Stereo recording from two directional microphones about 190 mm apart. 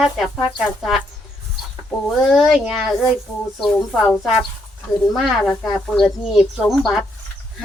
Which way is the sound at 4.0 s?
Centre (ahead or behind).